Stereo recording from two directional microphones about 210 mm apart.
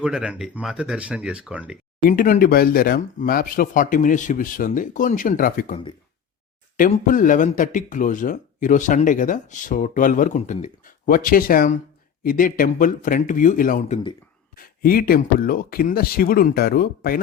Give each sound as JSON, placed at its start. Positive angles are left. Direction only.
{"t": 0.0, "sound": "speech", "side_deg": -5}
{"t": 2.0, "sound": "speech", "side_deg": 40}
{"t": 6.7, "sound": "speech", "side_deg": 40}